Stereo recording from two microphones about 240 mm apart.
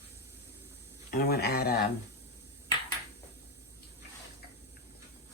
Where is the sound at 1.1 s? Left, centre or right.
Left.